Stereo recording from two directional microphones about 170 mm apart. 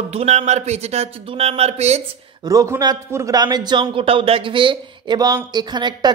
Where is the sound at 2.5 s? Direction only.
20° right (ahead or behind).